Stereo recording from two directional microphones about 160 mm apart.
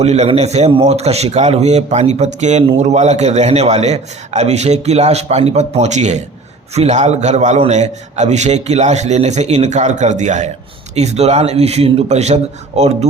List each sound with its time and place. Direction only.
0.0 s a man's voice: 40° right (ahead or behind)